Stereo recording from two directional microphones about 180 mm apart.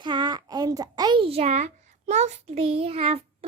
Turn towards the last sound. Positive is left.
turn(degrees=-35)  # may be behind; listen again after turning